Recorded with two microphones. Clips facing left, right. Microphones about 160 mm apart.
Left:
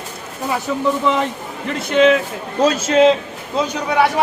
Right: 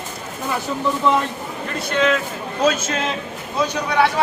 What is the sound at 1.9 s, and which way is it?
Speech, 20° left (ahead or behind).